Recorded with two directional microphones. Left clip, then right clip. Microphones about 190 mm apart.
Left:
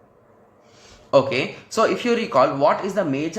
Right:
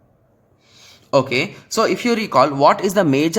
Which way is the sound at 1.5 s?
40° right (ahead or behind).